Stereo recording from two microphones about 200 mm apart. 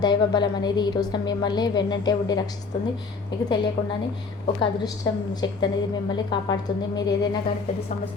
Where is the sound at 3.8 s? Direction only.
25° left (ahead or behind).